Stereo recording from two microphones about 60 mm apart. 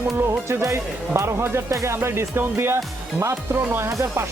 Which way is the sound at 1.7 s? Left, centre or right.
Right.